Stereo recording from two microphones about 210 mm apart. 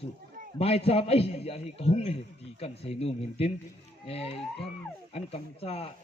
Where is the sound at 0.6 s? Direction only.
30° left (ahead or behind).